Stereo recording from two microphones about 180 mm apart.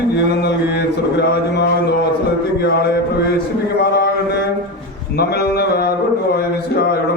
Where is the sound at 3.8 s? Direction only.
65° left (ahead or behind).